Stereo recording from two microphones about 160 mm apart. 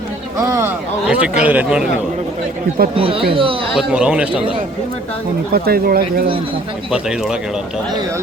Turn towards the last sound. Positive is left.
turn(degrees=-5)  # may be behind; listen again after turning